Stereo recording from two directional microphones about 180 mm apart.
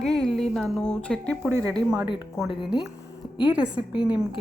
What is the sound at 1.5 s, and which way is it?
Speech, 15° right (ahead or behind).